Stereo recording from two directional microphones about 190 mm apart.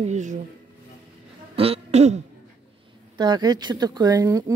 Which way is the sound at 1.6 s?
35° right (ahead or behind).